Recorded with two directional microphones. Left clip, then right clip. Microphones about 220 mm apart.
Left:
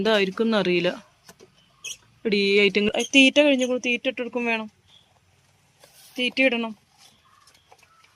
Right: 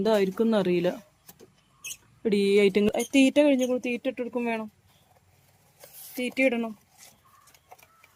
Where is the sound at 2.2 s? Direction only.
15° right (ahead or behind).